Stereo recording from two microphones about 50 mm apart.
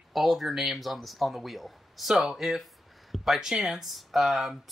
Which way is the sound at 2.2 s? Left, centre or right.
Centre.